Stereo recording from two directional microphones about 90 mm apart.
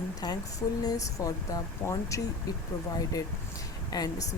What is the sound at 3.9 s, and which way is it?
Speech, 45° left (ahead or behind).